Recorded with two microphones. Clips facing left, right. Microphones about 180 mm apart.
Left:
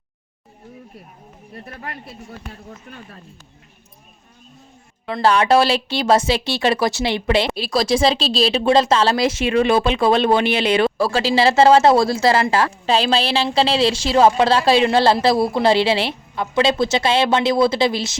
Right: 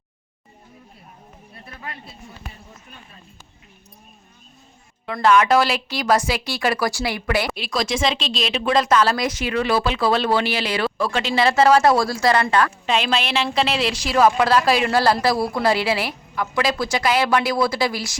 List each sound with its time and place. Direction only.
1.6 s speech: 45° left (ahead or behind)
5.0 s speech: 30° left (ahead or behind)
10.9 s speech: 35° left (ahead or behind)